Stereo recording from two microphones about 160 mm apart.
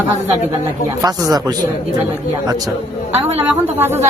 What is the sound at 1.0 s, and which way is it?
Speech, 25° right (ahead or behind).